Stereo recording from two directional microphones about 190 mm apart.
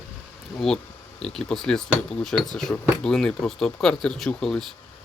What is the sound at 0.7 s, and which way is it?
Speech, centre (ahead or behind).